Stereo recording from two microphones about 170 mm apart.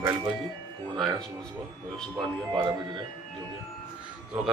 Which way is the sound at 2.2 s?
25° right (ahead or behind).